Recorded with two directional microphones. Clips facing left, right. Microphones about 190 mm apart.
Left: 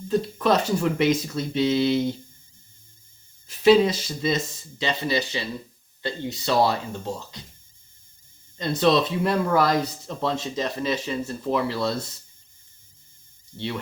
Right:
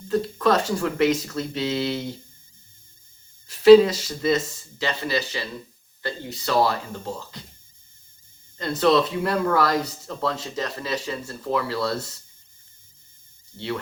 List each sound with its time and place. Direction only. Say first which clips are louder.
0.1 s speech: right 1 dB; 20° left (ahead or behind)
3.4 s speech: right 5 dB; 20° left (ahead or behind)
8.5 s speech: right 1 dB; 20° left (ahead or behind)